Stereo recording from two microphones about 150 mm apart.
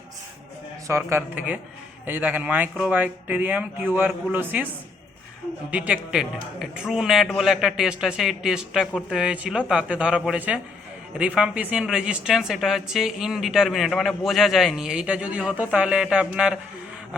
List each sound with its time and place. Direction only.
0.9 s a man's voice: 15° right (ahead or behind)
5.7 s a woman's voice: 10° right (ahead or behind)